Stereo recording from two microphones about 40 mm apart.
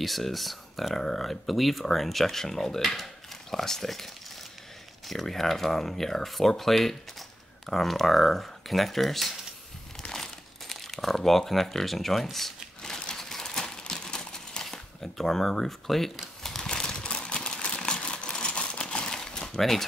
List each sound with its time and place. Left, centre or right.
0.0 s speech: centre
10.0 s crumpling: centre
10.7 s speech: centre
13.1 s crumpling: centre
16.4 s a sound: centre
18.7 s crumpling: left